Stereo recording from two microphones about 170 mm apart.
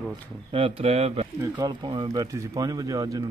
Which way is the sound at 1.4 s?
20° right (ahead or behind).